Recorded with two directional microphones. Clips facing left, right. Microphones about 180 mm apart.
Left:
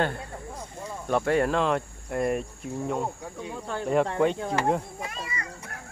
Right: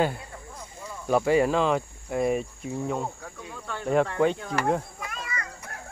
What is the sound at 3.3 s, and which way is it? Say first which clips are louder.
Speech: left 4 dB; 20° left (ahead or behind).